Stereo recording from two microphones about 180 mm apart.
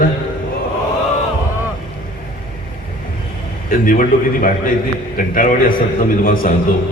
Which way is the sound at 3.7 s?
50° left (ahead or behind).